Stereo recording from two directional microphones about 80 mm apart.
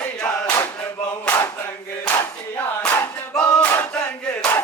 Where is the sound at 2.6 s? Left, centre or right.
Left.